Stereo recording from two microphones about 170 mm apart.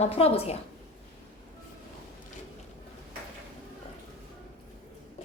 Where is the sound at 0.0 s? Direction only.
35° left (ahead or behind).